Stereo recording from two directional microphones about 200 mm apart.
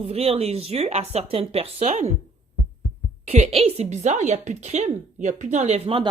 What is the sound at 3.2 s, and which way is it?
A woman's voice, 30° right (ahead or behind).